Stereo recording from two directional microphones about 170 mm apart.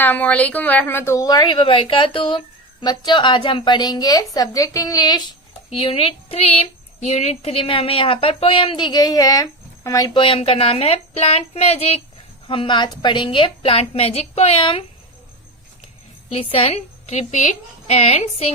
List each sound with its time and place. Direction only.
0.0 s a woman's voice: 10° left (ahead or behind); by 14.8 s 30° left (ahead or behind)
16.3 s a woman's voice: 35° left (ahead or behind)